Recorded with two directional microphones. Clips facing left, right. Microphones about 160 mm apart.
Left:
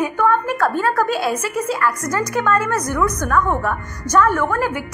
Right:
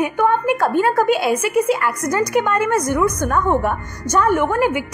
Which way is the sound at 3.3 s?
25° right (ahead or behind).